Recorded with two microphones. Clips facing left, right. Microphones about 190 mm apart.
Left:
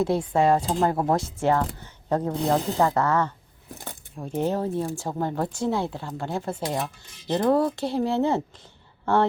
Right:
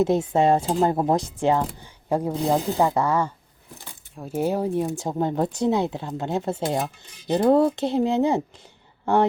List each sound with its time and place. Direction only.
0.0 s speech: 20° right (ahead or behind)